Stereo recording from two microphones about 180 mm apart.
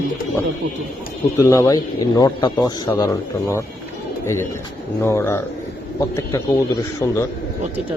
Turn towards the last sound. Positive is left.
turn(degrees=15)  # may be behind; listen again after turning